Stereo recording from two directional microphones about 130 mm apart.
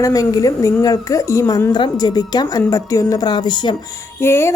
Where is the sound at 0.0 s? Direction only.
25° left (ahead or behind).